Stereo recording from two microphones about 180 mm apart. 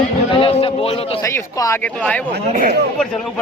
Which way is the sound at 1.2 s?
15° left (ahead or behind).